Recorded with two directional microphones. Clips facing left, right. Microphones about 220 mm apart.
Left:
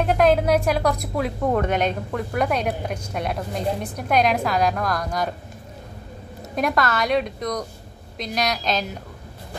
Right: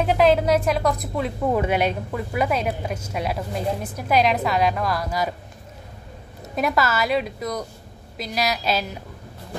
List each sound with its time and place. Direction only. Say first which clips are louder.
0.0 s a woman's voice: even; centre (ahead or behind)
1.6 s a woman's voice: even; 10° right (ahead or behind)
6.5 s a woman's voice: even; 5° right (ahead or behind)